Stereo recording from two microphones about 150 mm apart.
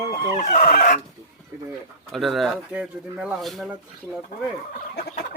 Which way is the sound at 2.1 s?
Centre (ahead or behind).